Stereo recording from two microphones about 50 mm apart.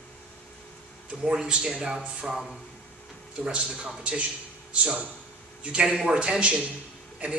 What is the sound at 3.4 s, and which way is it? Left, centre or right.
A man's voice, centre.